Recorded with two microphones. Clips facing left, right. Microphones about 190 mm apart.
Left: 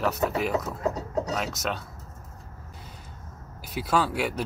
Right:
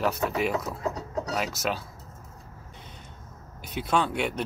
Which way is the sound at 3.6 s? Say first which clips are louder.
Left 1 dB; 5° left (ahead or behind).